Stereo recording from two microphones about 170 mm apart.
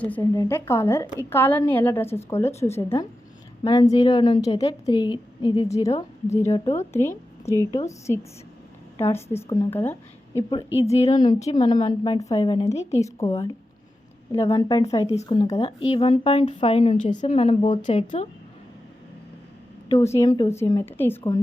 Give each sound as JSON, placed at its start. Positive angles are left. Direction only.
{"t": 0.0, "sound": "a woman's voice", "side_deg": 10}
{"t": 3.6, "sound": "a woman's voice", "side_deg": 30}
{"t": 10.8, "sound": "speech", "side_deg": 40}
{"t": 11.5, "sound": "a woman's voice", "side_deg": 25}
{"t": 12.9, "sound": "a woman's voice", "side_deg": 20}
{"t": 17.8, "sound": "speech", "side_deg": 45}
{"t": 20.0, "sound": "a woman's voice", "side_deg": 15}